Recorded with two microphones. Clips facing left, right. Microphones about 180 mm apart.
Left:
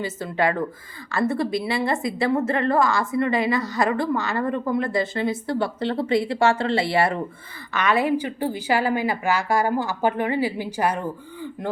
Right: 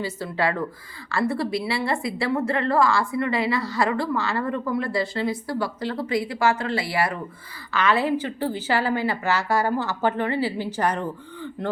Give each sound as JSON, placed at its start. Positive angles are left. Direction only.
{"t": 0.0, "sound": "a woman's voice", "side_deg": 20}